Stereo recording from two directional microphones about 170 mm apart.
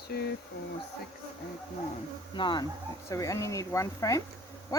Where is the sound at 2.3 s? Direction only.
30° left (ahead or behind).